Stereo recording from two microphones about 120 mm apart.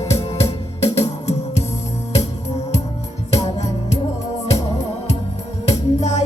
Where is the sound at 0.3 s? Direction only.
60° left (ahead or behind).